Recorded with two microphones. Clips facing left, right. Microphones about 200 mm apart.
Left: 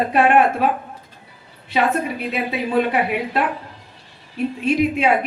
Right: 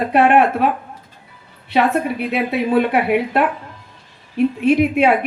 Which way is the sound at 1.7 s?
60° right (ahead or behind).